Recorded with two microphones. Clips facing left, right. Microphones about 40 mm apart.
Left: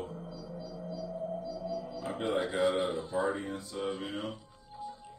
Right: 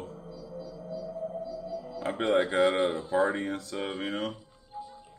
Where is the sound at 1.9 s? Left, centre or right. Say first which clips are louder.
Right 8 dB; right.